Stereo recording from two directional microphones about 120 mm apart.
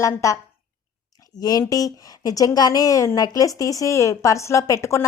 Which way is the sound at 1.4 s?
30° left (ahead or behind).